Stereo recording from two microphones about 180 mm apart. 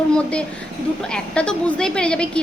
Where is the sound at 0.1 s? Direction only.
5° left (ahead or behind).